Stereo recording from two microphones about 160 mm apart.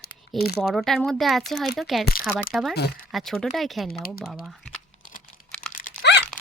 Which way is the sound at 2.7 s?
85° left.